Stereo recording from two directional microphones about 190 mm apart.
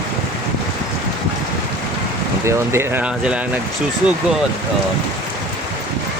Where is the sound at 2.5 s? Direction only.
10° right (ahead or behind).